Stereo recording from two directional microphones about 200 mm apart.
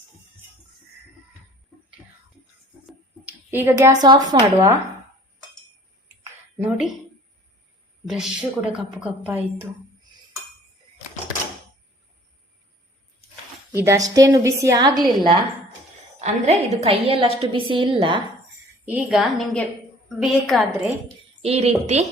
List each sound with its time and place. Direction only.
2.8 s speech: 10° right (ahead or behind)
6.6 s a woman's voice: 5° right (ahead or behind)
8.1 s a woman's voice: 5° right (ahead or behind)
13.7 s a woman's voice: 15° right (ahead or behind)
16.2 s a woman's voice: 35° right (ahead or behind)
18.9 s a woman's voice: 5° right (ahead or behind)
21.4 s a woman's voice: 30° right (ahead or behind)